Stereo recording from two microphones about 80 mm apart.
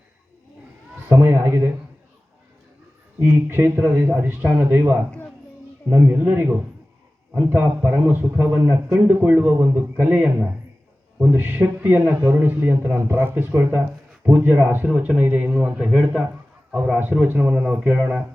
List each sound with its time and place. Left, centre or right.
1.0 s a man's voice: right
3.2 s a man's voice: right
15.9 s a man's voice: centre